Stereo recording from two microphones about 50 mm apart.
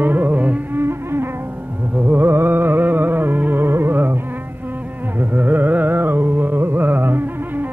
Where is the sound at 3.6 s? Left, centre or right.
Right.